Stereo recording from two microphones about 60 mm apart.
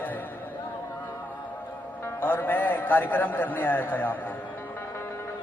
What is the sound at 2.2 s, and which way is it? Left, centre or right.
A man's voice, left.